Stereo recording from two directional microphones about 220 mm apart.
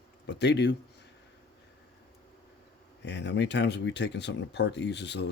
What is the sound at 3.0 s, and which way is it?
Speech, 50° left (ahead or behind).